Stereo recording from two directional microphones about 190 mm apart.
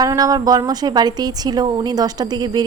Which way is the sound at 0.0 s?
20° right (ahead or behind).